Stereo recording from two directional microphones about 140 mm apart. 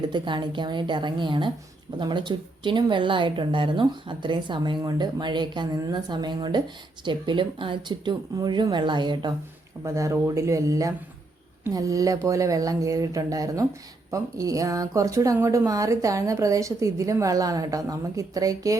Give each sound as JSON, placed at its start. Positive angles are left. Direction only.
{"t": 0.1, "sound": "speech", "side_deg": -35}
{"t": 9.8, "sound": "a woman's voice", "side_deg": -20}